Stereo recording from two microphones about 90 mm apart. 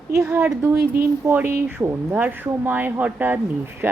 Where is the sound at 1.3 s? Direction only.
20° right (ahead or behind).